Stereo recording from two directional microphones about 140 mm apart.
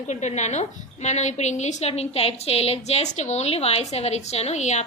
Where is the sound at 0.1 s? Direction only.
55° left (ahead or behind).